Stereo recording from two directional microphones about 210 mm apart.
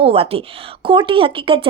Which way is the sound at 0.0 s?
25° right (ahead or behind).